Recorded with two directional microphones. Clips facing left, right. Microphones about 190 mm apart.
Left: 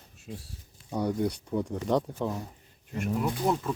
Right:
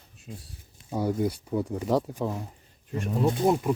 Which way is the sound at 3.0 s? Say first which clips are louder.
Right 4 dB; 30° right (ahead or behind).